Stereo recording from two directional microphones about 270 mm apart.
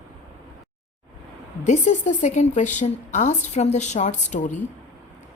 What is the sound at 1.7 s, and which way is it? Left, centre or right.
Speech, left.